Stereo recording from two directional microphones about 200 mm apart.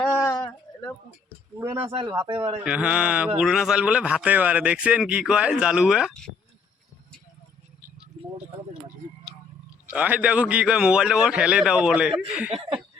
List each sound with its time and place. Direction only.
0.0 s a sound: 10° left (ahead or behind)
1.8 s speech: 25° right (ahead or behind)
2.6 s a man's voice: 5° right (ahead or behind)
9.9 s a man's voice: 5° right (ahead or behind)